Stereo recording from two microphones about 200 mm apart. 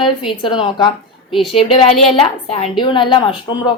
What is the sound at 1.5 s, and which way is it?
A woman's voice, 30° left (ahead or behind).